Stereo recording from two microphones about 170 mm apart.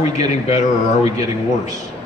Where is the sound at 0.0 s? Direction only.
40° left (ahead or behind).